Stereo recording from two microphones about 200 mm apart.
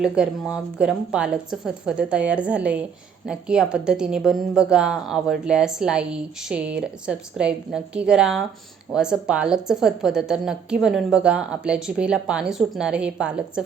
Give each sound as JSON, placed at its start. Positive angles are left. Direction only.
{"t": 0.0, "sound": "a woman's voice", "side_deg": -5}